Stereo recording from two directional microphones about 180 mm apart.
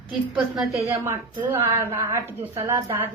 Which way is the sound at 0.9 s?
15° right (ahead or behind).